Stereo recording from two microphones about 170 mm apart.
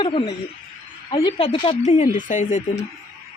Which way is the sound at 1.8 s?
45° left (ahead or behind).